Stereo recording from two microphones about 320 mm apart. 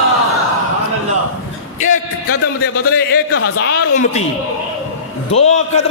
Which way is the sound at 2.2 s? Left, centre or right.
Left.